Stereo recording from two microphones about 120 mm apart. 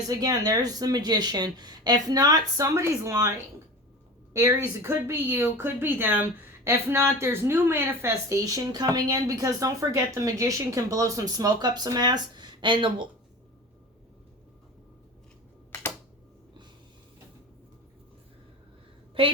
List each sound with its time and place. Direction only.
0.2 s speech: 30° right (ahead or behind)
19.2 s a woman's voice: 45° right (ahead or behind)